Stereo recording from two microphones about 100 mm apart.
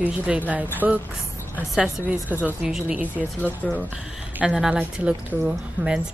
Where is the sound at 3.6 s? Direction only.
15° left (ahead or behind).